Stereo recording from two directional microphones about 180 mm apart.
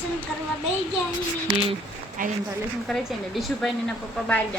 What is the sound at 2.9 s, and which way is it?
A woman's voice, centre (ahead or behind).